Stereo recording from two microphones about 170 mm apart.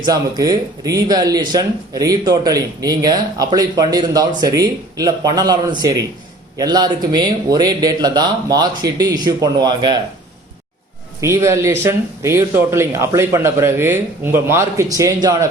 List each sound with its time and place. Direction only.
0.0 s speech: 20° right (ahead or behind)
11.2 s speech: 15° right (ahead or behind)